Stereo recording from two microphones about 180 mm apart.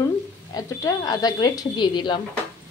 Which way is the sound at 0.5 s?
20° left (ahead or behind).